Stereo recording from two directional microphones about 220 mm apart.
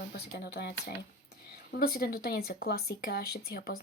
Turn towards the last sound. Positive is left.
turn(degrees=45)  # may be behind; listen again after turning